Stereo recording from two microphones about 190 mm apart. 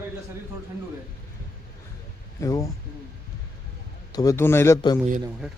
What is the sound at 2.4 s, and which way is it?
Speech, 15° left (ahead or behind).